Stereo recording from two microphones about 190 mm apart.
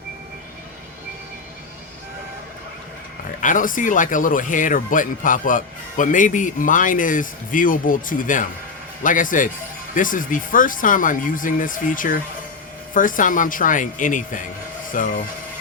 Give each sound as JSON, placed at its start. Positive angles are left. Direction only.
{"t": 3.4, "sound": "speech", "side_deg": 45}